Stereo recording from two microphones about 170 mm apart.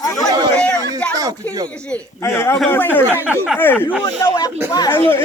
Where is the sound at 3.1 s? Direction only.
10° right (ahead or behind).